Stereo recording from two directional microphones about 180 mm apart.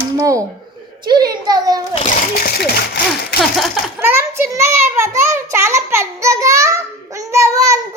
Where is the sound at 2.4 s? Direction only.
60° left (ahead or behind).